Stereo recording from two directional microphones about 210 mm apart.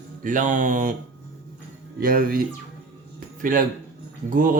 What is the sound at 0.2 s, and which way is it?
Mantra, 40° right (ahead or behind).